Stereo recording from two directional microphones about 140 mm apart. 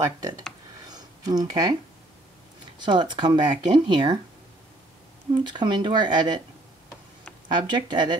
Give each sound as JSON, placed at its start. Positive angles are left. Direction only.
{"t": 0.8, "sound": "a sound", "side_deg": -30}
{"t": 2.8, "sound": "speech", "side_deg": -35}
{"t": 5.4, "sound": "speech", "side_deg": -35}
{"t": 7.4, "sound": "speech", "side_deg": -30}